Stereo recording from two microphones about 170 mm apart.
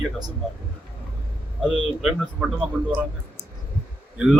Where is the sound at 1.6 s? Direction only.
5° right (ahead or behind).